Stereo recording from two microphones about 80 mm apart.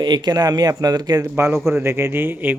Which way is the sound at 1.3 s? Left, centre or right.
Right.